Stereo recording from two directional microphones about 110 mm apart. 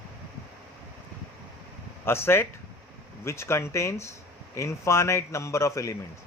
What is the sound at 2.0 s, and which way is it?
A man's voice, 20° left (ahead or behind).